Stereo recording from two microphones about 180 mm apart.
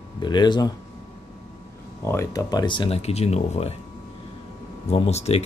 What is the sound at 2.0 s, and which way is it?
Speech, 15° left (ahead or behind).